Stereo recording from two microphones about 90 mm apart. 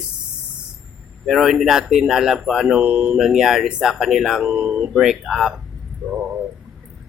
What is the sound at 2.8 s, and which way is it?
Speech, 20° right (ahead or behind).